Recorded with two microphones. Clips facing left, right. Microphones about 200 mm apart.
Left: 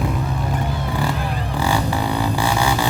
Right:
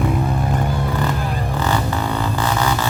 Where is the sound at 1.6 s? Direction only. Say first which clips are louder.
Left 1 dB; 10° left (ahead or behind).